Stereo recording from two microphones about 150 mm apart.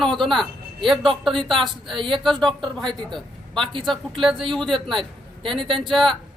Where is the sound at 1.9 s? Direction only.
35° right (ahead or behind).